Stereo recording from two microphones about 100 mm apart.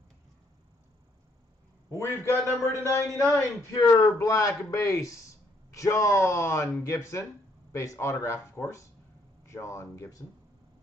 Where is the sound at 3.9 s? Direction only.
35° left (ahead or behind).